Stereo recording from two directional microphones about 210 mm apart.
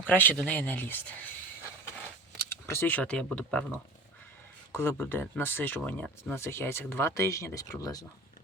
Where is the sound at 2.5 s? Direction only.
10° left (ahead or behind).